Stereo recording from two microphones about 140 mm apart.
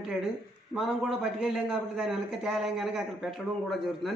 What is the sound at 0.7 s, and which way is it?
A man's voice, 5° right (ahead or behind).